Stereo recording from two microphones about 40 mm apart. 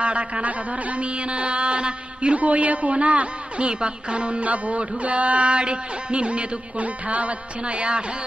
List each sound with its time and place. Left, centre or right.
0.0 s speech: right